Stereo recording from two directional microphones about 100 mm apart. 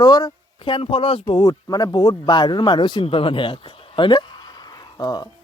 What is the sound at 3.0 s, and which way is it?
Speech, 65° left (ahead or behind).